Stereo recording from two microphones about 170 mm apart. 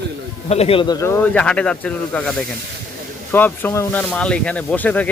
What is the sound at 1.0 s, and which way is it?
Speech, 15° left (ahead or behind).